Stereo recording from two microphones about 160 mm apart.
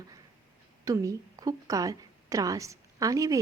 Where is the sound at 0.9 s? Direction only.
20° right (ahead or behind).